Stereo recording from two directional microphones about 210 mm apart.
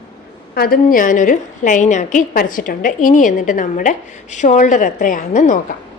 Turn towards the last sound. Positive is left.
turn(degrees=35)  # may be behind; listen again after turning